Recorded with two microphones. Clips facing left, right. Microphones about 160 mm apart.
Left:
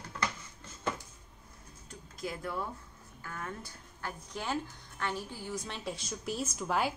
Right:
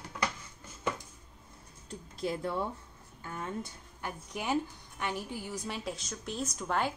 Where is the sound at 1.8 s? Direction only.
30° right (ahead or behind); by 6.9 s 5° left (ahead or behind).